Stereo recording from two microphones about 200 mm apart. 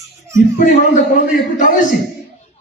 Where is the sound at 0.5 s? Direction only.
45° left (ahead or behind).